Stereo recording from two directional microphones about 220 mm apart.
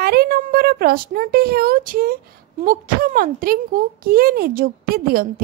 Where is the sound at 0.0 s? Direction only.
45° right (ahead or behind).